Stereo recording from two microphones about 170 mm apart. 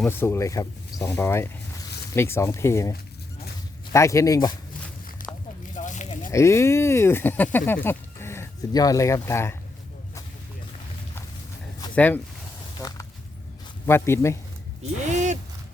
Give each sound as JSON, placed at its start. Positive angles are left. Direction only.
{"t": 0.0, "sound": "speech", "side_deg": 15}
{"t": 3.9, "sound": "speech", "side_deg": 20}
{"t": 5.7, "sound": "a sound", "side_deg": 45}
{"t": 6.3, "sound": "speech", "side_deg": 15}
{"t": 11.9, "sound": "speech", "side_deg": 10}
{"t": 13.8, "sound": "speech", "side_deg": 15}